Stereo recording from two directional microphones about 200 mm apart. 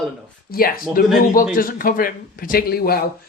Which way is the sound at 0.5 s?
45° left (ahead or behind).